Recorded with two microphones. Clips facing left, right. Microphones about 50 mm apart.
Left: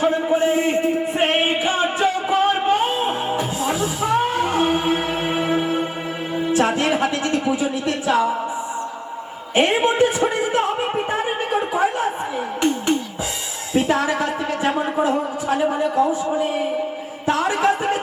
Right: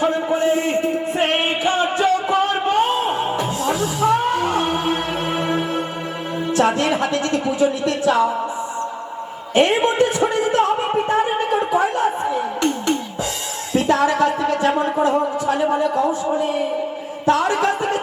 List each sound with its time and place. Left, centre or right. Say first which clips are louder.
0.0 s music: even; centre
6.4 s speech: right 1 dB; centre
9.6 s speech: right 1 dB; centre
11.2 s a sound: right 3 dB; centre
13.7 s music: right 3 dB; centre
14.8 s speech: right 2 dB; centre